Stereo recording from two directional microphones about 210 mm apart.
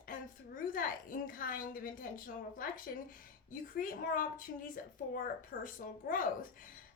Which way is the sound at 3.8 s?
40° left (ahead or behind).